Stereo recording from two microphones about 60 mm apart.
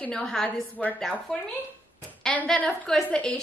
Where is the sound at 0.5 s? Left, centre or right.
Left.